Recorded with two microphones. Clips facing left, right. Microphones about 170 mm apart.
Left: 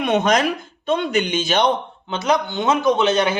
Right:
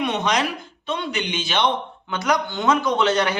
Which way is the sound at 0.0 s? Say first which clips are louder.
Left 5 dB; 50° left (ahead or behind).